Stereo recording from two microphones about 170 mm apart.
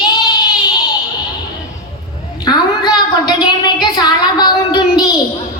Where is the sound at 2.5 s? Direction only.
25° left (ahead or behind).